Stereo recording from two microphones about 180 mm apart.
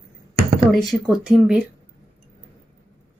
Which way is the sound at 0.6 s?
Centre (ahead or behind).